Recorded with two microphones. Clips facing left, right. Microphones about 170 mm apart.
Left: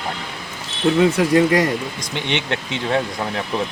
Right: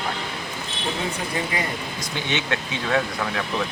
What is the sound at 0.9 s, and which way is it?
Speech, 85° left.